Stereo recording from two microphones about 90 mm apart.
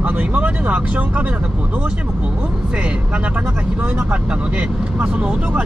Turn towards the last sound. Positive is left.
turn(degrees=-15)  # may be behind; listen again after turning